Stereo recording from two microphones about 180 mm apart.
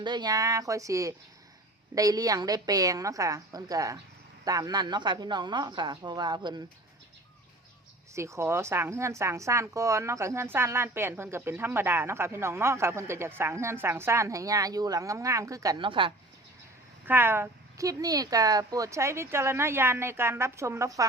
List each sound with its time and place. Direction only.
0.0 s a woman's voice: 25° right (ahead or behind)
8.1 s a woman's voice: 15° right (ahead or behind)
17.1 s a woman's voice: 10° right (ahead or behind)